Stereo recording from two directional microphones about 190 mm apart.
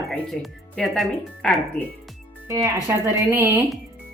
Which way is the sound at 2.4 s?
15° right (ahead or behind).